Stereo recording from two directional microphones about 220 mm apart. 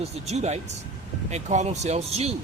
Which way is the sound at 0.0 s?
30° right (ahead or behind).